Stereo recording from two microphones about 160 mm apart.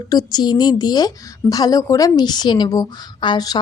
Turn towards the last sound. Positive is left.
turn(degrees=25)  # may be behind; listen again after turning